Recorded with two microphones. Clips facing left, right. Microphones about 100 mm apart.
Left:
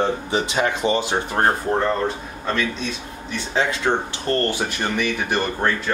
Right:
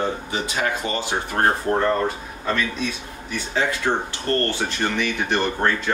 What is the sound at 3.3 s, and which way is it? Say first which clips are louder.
Speech: left 1 dB; 20° left (ahead or behind).